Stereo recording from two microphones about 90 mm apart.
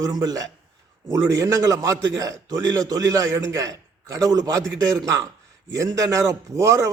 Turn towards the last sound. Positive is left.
turn(degrees=-35)  # may be behind; listen again after turning